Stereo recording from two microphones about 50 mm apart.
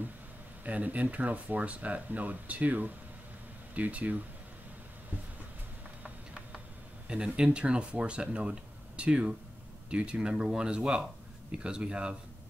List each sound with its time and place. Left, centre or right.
0.7 s speech: right
6.0 s a sound: right
7.1 s speech: centre